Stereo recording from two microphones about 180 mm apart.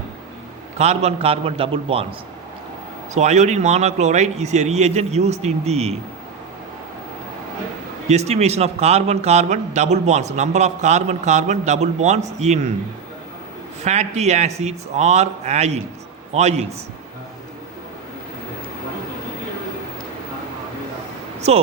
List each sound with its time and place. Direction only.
0.8 s a man's voice: 35° right (ahead or behind)
3.2 s a man's voice: 40° right (ahead or behind)
8.0 s a man's voice: 40° right (ahead or behind)
13.8 s a man's voice: 40° right (ahead or behind)